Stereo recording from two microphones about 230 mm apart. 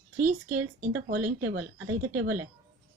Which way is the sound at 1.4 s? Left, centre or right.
Right.